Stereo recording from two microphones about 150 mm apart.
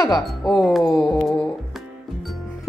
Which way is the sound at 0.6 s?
Centre (ahead or behind).